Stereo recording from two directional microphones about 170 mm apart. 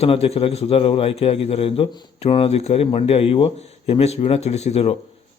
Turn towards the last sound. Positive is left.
turn(degrees=40)  # may be behind; listen again after turning